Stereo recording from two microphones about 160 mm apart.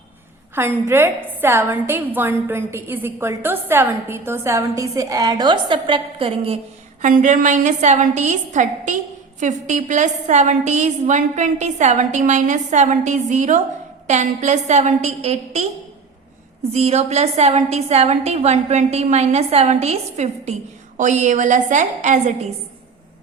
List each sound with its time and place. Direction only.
0.5 s a woman's voice: 15° right (ahead or behind); by 6.6 s 35° right (ahead or behind)
7.0 s a woman's voice: 50° right (ahead or behind)
16.7 s a woman's voice: 40° right (ahead or behind)